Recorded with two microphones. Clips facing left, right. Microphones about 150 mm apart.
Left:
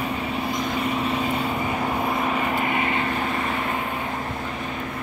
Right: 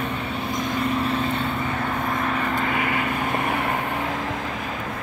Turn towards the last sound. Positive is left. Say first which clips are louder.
# even
turn(degrees=25)  # may be behind; listen again after turning